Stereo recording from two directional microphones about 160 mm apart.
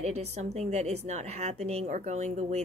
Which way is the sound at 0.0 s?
45° right (ahead or behind).